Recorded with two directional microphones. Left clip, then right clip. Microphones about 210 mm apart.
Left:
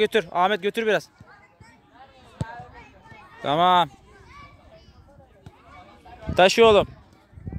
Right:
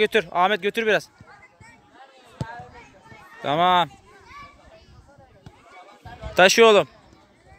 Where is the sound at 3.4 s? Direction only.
10° left (ahead or behind).